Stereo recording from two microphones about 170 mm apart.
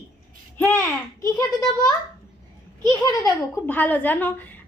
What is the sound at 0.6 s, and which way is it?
A woman's voice, 15° left (ahead or behind).